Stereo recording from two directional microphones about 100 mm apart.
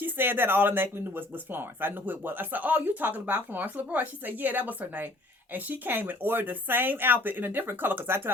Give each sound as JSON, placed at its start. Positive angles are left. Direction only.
{"t": 0.0, "sound": "speech", "side_deg": -20}